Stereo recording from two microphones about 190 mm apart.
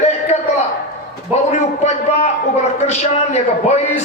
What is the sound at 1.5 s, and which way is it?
A man's voice, 35° left (ahead or behind).